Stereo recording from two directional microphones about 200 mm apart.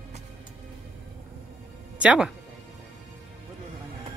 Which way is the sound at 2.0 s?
5° right (ahead or behind).